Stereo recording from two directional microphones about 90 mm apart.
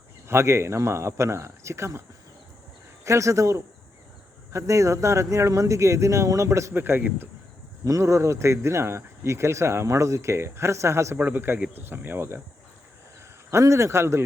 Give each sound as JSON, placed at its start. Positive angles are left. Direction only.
{"t": 0.3, "sound": "speech", "side_deg": -30}
{"t": 7.9, "sound": "speech", "side_deg": -35}
{"t": 13.5, "sound": "speech", "side_deg": -35}